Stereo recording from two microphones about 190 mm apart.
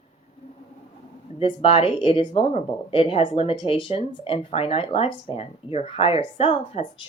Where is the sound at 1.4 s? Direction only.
30° left (ahead or behind).